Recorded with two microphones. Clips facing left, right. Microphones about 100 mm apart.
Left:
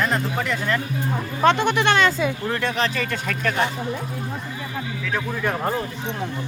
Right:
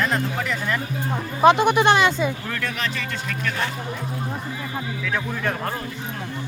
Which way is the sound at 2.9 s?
45° left (ahead or behind).